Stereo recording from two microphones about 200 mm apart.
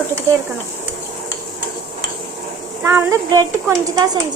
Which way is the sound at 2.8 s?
15° right (ahead or behind).